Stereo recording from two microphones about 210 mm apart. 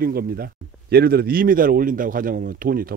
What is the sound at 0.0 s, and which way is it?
Speech, 45° right (ahead or behind).